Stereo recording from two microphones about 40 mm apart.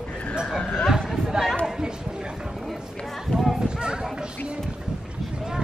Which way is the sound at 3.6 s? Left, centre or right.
Right.